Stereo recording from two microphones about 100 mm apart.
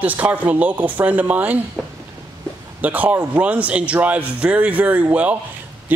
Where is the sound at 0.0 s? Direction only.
15° right (ahead or behind).